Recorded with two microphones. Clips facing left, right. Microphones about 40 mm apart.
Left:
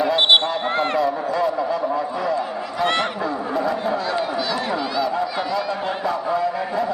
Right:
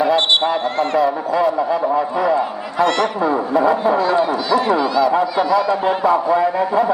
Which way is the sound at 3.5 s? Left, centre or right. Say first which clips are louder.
Right 7 dB; right.